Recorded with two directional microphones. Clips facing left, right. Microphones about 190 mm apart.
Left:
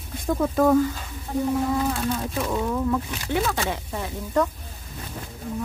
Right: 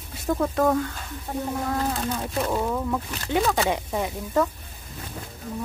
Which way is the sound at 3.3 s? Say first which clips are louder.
Right 3 dB; 20° right (ahead or behind).